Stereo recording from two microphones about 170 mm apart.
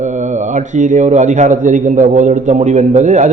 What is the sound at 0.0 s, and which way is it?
A man's voice, 45° right (ahead or behind).